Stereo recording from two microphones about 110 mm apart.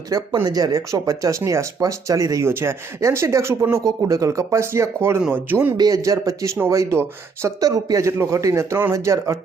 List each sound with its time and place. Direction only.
0.1 s speech: 35° right (ahead or behind); by 5.7 s 20° right (ahead or behind)
5.7 s speech: 35° right (ahead or behind)